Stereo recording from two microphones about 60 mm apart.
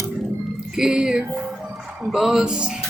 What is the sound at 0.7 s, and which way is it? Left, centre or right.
Speech, centre.